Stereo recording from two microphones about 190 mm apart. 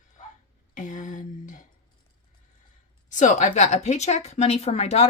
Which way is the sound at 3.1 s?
40° left (ahead or behind).